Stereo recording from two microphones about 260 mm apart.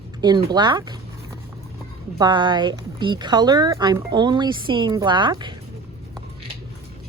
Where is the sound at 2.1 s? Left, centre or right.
Centre.